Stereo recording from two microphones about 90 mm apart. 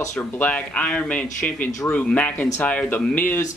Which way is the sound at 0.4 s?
15° left (ahead or behind).